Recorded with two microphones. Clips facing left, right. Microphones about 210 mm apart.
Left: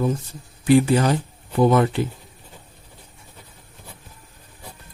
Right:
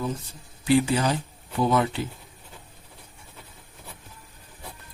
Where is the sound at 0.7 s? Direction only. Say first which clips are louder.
Left 5 dB; 50° left (ahead or behind).